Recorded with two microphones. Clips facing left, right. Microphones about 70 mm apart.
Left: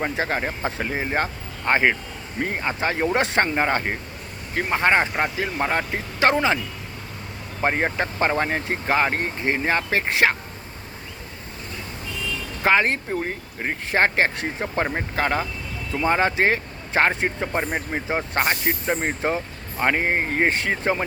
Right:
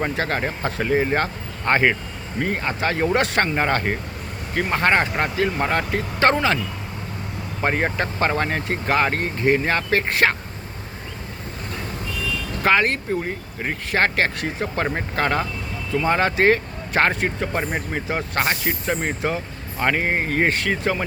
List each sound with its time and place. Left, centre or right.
0.2 s speech: centre
3.5 s speech: centre
7.6 s speech: centre
12.6 s speech: centre
13.9 s speech: left
14.8 s speech: centre
17.9 s speech: centre
20.5 s speech: left